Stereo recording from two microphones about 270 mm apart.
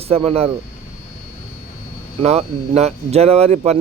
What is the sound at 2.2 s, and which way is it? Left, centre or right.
Speech, right.